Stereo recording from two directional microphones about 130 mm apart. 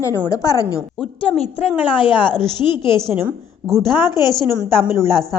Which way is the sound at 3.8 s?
30° left (ahead or behind).